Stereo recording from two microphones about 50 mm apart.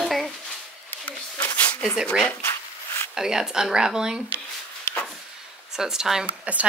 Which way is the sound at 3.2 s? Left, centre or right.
Centre.